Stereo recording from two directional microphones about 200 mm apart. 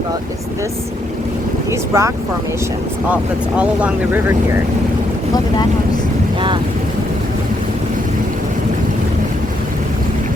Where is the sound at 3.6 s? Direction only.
5° right (ahead or behind).